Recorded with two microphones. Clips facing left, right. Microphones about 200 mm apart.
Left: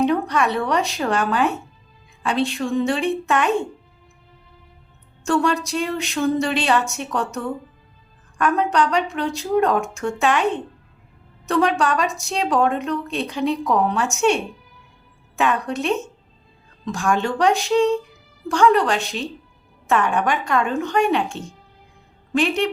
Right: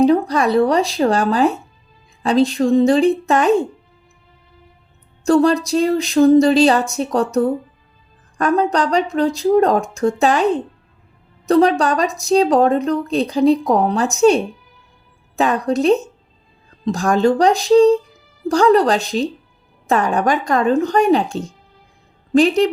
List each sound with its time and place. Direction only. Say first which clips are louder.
0.0 s a woman's voice: right 5 dB; 35° right (ahead or behind)
5.2 s a woman's voice: right 7 dB; 35° right (ahead or behind)